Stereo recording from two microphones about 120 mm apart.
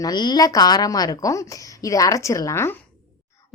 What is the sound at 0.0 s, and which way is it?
A woman's voice, 35° left (ahead or behind).